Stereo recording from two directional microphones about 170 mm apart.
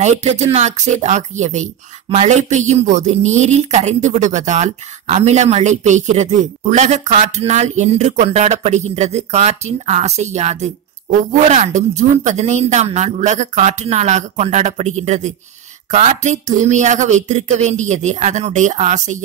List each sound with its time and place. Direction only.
0.0 s speech: 40° right (ahead or behind)